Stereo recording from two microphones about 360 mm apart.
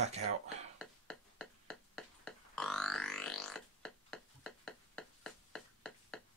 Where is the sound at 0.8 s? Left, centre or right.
Centre.